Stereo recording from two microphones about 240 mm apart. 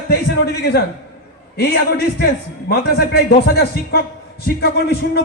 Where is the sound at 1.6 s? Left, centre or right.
Left.